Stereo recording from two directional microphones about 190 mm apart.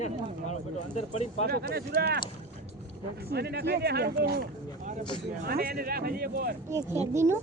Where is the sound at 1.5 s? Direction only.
55° right (ahead or behind).